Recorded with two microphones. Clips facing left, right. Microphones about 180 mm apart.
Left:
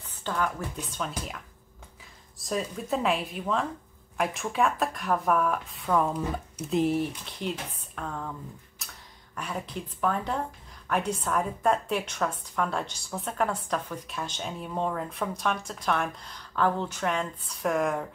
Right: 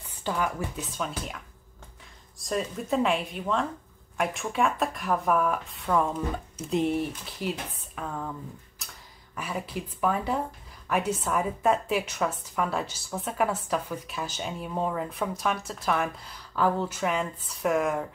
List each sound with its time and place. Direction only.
0.2 s a woman's voice: 10° right (ahead or behind)
2.4 s a woman's voice: centre (ahead or behind)